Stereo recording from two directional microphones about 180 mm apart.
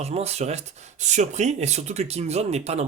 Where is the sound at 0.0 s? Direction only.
35° right (ahead or behind).